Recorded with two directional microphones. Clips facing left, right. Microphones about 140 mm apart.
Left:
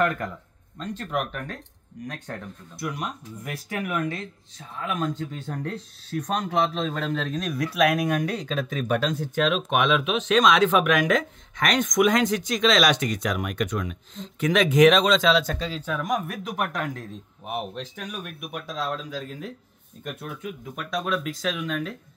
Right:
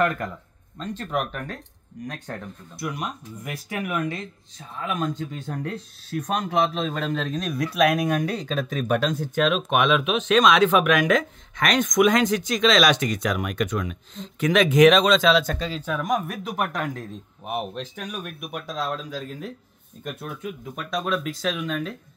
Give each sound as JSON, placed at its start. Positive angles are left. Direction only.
{"t": 0.0, "sound": "speech", "side_deg": -10}
{"t": 1.1, "sound": "speech", "side_deg": -35}
{"t": 2.8, "sound": "speech", "side_deg": -15}
{"t": 17.5, "sound": "speech", "side_deg": -50}
{"t": 20.8, "sound": "speech", "side_deg": -25}